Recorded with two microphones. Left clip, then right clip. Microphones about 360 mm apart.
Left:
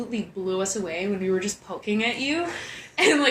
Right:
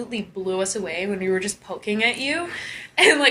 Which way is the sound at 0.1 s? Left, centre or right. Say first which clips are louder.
Right 2 dB; right.